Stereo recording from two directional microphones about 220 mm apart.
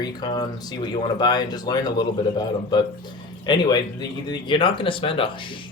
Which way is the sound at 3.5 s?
20° left (ahead or behind).